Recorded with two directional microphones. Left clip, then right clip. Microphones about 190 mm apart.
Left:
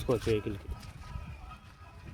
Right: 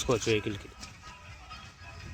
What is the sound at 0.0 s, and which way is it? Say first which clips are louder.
Speech: right 2 dB; 5° left (ahead or behind).